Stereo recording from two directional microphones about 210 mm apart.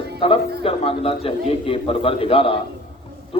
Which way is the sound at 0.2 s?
25° left (ahead or behind).